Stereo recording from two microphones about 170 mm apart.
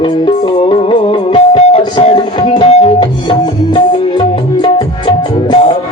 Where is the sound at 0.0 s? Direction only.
30° left (ahead or behind).